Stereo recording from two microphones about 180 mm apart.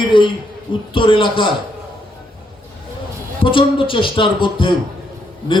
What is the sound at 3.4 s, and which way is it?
Speech, 30° left (ahead or behind).